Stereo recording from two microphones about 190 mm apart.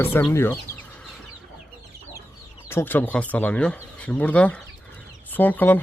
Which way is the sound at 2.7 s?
10° left (ahead or behind).